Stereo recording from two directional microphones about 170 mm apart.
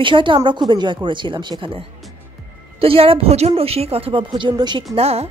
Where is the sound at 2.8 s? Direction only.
35° right (ahead or behind).